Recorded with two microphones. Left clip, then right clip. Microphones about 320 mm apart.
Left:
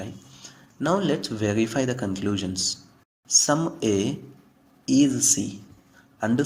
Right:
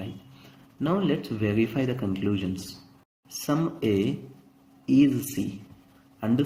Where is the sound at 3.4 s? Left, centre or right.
Left.